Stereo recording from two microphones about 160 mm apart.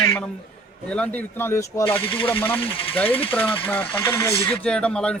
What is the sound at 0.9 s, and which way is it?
A man's voice, 10° left (ahead or behind).